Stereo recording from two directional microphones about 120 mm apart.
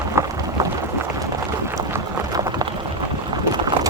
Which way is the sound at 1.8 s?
30° right (ahead or behind).